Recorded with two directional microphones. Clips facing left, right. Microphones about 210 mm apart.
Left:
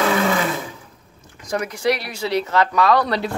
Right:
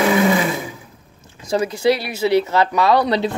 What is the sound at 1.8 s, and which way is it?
Speech, 30° right (ahead or behind).